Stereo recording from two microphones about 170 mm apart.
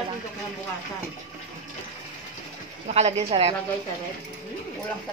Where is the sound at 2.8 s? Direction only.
40° right (ahead or behind).